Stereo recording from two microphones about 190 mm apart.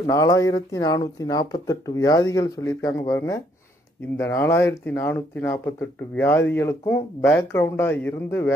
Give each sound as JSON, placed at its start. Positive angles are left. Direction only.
{"t": 0.0, "sound": "speech", "side_deg": 15}